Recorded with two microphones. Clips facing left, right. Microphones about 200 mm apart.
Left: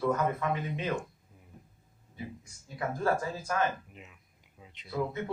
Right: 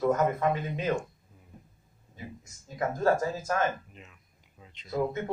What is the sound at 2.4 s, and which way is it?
Speech, 45° right (ahead or behind).